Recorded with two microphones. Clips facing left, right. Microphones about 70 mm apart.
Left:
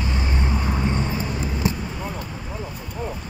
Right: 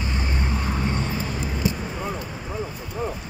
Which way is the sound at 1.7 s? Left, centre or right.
Centre.